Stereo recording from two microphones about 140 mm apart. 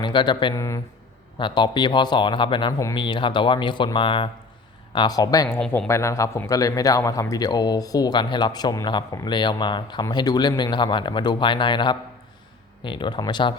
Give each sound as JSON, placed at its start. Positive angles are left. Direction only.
{"t": 0.0, "sound": "a man's voice", "side_deg": 35}